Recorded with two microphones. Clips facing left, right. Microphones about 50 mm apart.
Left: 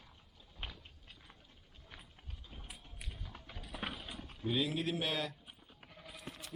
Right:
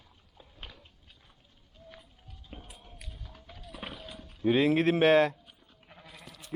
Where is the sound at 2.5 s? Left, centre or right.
Right.